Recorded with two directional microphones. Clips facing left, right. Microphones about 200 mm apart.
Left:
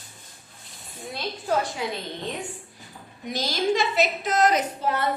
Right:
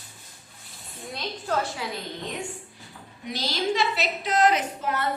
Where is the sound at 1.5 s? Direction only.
10° left (ahead or behind).